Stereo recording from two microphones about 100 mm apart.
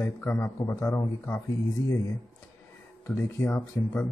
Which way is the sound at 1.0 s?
30° left (ahead or behind).